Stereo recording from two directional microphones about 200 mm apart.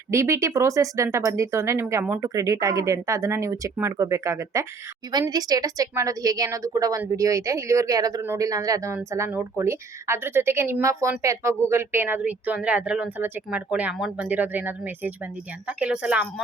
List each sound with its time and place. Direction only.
0.1 s a woman's voice: 15° right (ahead or behind)